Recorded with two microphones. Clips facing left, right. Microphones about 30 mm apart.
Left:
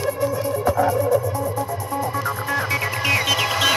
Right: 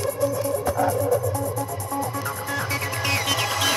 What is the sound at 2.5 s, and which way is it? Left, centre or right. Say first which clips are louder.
Music: left 4 dB; left.